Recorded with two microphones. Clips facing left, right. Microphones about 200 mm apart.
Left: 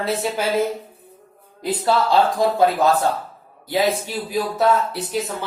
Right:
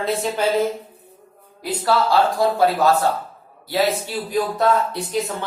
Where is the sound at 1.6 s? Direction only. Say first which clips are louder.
Even; 20° left (ahead or behind).